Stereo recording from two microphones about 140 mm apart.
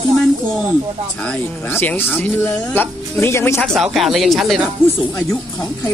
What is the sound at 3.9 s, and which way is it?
Speech, centre (ahead or behind).